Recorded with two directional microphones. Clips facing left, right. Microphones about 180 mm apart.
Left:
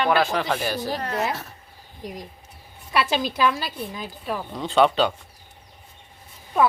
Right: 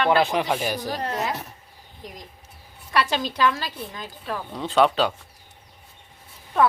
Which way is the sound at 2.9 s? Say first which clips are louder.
Left 1 dB; 10° left (ahead or behind).